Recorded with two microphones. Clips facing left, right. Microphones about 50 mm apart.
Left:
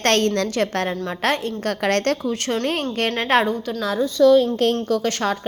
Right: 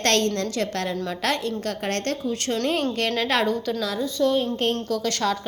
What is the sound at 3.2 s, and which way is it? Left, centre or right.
Speech, left.